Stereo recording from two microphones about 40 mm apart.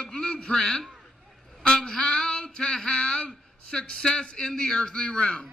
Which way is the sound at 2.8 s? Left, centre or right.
Left.